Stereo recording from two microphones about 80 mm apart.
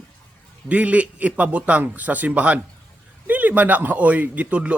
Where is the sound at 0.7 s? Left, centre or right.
Centre.